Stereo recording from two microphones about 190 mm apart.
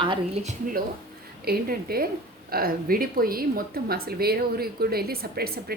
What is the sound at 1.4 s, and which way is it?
Speech, 55° right (ahead or behind).